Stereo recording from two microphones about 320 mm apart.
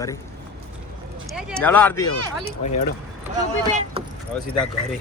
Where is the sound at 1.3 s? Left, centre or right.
Centre.